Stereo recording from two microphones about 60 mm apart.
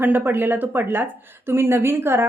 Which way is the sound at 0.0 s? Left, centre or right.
Right.